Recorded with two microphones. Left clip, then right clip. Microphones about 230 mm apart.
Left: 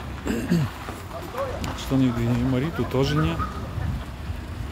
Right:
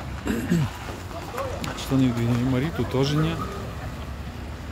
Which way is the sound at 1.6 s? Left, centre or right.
Centre.